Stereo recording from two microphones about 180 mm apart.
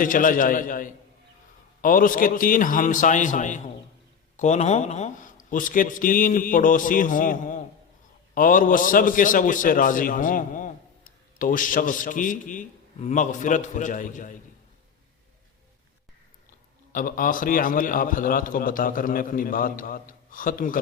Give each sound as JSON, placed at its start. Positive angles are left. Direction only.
{"t": 0.0, "sound": "a man's voice", "side_deg": 50}
{"t": 16.9, "sound": "a man's voice", "side_deg": 50}